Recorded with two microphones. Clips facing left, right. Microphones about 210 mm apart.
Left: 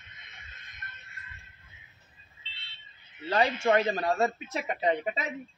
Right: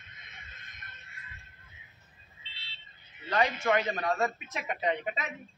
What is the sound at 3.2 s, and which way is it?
A man's voice, 30° left (ahead or behind).